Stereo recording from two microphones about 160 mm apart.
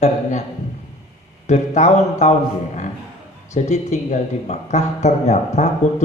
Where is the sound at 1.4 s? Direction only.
45° left (ahead or behind).